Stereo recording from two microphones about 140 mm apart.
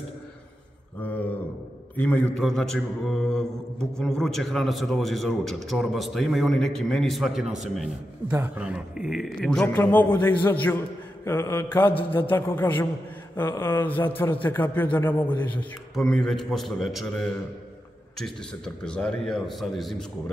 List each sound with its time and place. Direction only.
2.0 s a man's voice: 5° left (ahead or behind)
11.2 s mantra: 20° left (ahead or behind)
12.1 s a man's voice: 15° left (ahead or behind)
18.9 s a man's voice: 5° left (ahead or behind)